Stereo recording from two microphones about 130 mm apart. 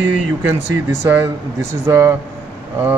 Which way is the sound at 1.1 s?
20° right (ahead or behind).